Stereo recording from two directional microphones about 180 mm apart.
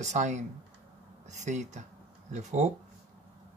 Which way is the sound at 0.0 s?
40° right (ahead or behind).